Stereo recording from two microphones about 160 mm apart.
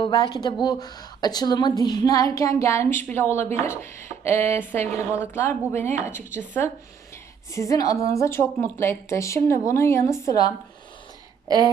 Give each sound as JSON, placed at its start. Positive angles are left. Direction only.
{"t": 0.0, "sound": "a woman's voice", "side_deg": 25}